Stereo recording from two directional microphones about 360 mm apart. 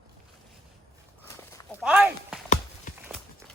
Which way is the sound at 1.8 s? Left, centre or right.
Centre.